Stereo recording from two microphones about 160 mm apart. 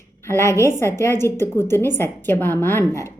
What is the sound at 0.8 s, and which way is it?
A woman's voice, 15° left (ahead or behind).